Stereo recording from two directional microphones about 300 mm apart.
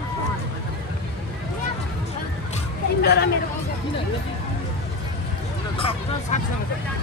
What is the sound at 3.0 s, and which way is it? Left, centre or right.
Speech, left.